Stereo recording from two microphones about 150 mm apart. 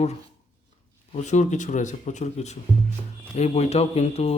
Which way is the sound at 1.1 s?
50° left (ahead or behind).